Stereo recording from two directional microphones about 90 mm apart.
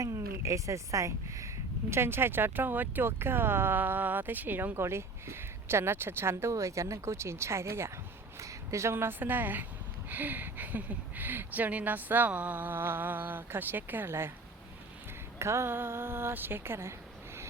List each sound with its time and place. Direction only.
0.0 s speech: 35° right (ahead or behind)
15.4 s speech: 30° right (ahead or behind)